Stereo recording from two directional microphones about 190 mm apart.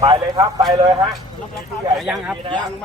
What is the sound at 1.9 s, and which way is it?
Speech, 5° right (ahead or behind).